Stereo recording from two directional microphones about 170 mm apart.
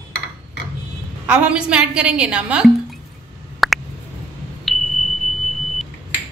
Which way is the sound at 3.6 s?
Centre (ahead or behind).